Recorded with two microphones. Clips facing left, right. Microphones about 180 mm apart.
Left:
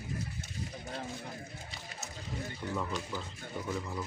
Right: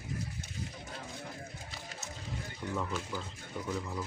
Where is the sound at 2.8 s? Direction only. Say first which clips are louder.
Right 1 dB; 5° right (ahead or behind).